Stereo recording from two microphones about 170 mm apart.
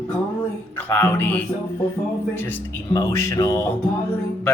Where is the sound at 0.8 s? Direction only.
10° left (ahead or behind).